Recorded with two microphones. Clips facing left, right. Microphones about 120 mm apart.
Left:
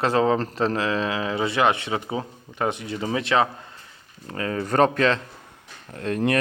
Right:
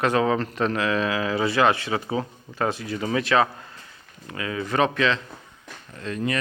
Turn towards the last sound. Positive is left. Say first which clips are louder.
# left 4 dB
turn(degrees=60)  # may be behind; listen again after turning